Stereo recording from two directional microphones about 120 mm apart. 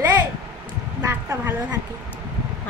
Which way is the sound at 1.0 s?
25° right (ahead or behind).